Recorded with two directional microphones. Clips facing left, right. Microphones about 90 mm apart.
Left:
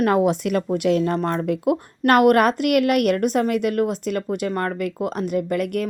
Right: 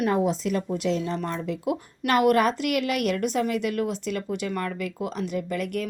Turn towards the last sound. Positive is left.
turn(degrees=55)  # may be behind; listen again after turning